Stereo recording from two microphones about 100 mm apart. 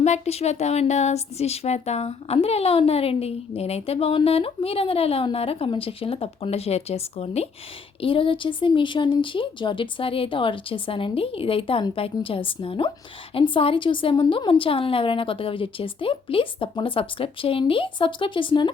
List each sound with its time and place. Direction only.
0.3 s speech: 90° left
8.0 s a woman's voice: 60° left (ahead or behind)